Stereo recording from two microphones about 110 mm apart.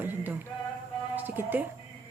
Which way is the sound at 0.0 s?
20° right (ahead or behind).